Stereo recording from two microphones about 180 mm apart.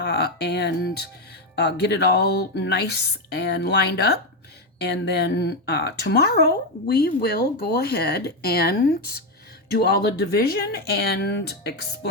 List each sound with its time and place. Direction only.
0.0 s a woman's voice: 60° left (ahead or behind)